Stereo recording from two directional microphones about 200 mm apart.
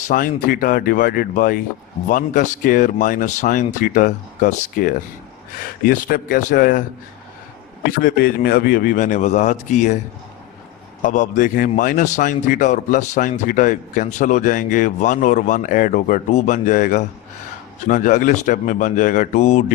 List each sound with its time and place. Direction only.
0.1 s a man's voice: 45° left (ahead or behind)
7.9 s a man's voice: 45° left (ahead or behind)
11.0 s a man's voice: 40° left (ahead or behind)